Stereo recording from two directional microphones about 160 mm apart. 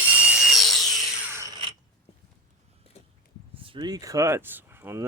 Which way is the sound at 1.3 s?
15° right (ahead or behind).